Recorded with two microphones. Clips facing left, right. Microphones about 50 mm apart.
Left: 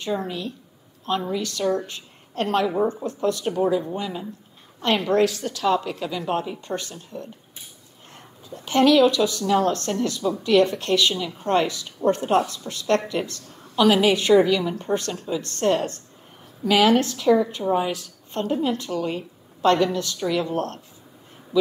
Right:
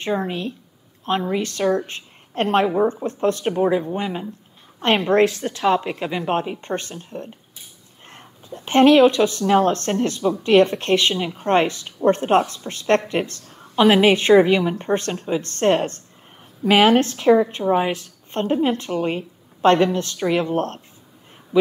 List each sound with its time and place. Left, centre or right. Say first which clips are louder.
0.0 s a woman's voice: right 3 dB; right